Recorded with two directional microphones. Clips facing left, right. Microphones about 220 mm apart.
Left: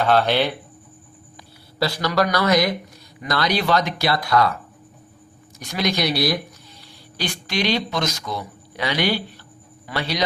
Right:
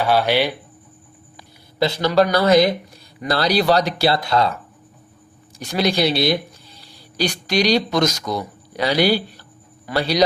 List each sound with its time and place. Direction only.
0.0 s speech: 10° right (ahead or behind)
1.8 s speech: 25° right (ahead or behind)
5.5 s speech: 30° right (ahead or behind)
7.2 s a man's voice: 40° right (ahead or behind)